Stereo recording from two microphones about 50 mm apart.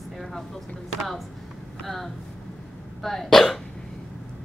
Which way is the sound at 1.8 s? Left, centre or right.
Centre.